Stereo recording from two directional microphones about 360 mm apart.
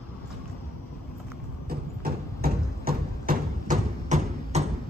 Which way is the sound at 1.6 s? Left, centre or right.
Right.